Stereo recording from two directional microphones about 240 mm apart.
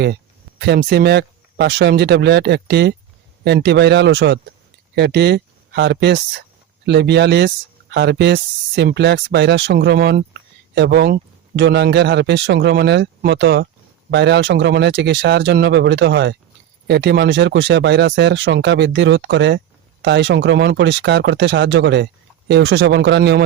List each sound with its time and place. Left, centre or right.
0.6 s speech: right